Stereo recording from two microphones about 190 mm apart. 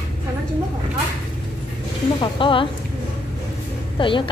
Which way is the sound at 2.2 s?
25° left (ahead or behind).